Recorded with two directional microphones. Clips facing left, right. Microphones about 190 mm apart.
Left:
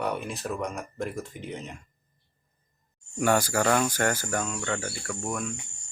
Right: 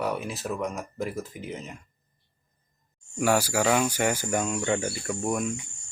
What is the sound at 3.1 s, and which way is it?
Speech, 5° right (ahead or behind).